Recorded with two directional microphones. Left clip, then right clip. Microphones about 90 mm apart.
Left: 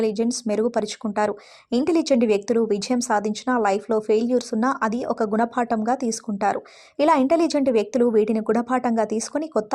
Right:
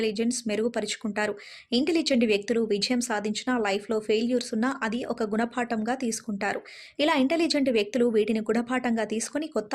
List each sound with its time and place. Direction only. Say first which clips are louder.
0.0 s a woman's voice: left 5 dB; 30° left (ahead or behind)
5.0 s speech: left 6 dB; 5° right (ahead or behind)
5.3 s a woman's voice: left 6 dB; 30° left (ahead or behind)